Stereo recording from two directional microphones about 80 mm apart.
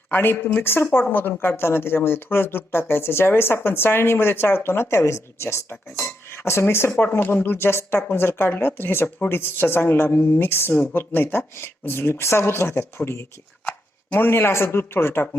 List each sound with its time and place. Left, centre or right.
0.1 s speech: left